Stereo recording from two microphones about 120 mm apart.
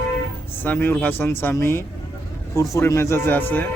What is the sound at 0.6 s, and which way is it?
Speech, 15° left (ahead or behind).